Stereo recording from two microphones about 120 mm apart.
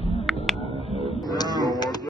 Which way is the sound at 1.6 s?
35° left (ahead or behind).